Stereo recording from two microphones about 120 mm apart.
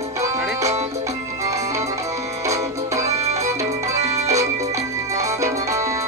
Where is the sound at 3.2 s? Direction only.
65° right (ahead or behind).